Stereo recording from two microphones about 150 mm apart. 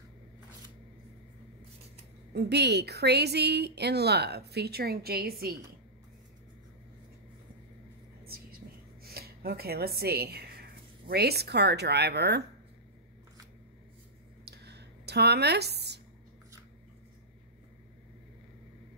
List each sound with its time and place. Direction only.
2.3 s a woman's voice: 90° right
9.0 s speech: 90° right
14.4 s a sound: 90° right